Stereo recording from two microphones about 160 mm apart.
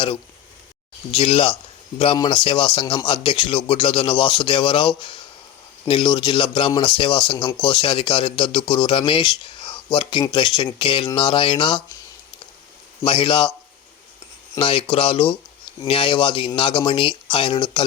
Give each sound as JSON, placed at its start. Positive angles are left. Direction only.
{"t": 1.1, "sound": "speech", "side_deg": 35}
{"t": 13.1, "sound": "speech", "side_deg": 35}
{"t": 14.6, "sound": "speech", "side_deg": 35}